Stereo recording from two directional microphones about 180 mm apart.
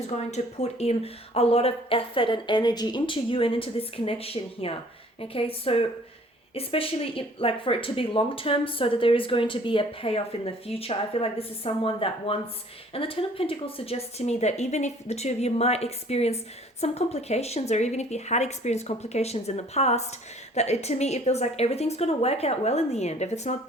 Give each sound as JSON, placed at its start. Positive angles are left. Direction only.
{"t": 0.3, "sound": "speech", "side_deg": 35}